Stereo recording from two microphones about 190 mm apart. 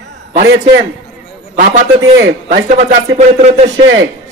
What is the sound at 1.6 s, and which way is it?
Speech, 45° right (ahead or behind).